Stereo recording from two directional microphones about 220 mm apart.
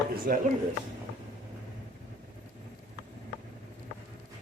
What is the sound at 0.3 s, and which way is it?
Speech, 40° right (ahead or behind).